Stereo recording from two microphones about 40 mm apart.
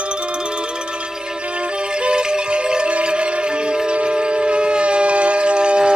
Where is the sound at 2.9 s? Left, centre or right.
Right.